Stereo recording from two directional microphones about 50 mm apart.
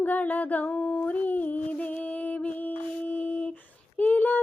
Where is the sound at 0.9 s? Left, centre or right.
Left.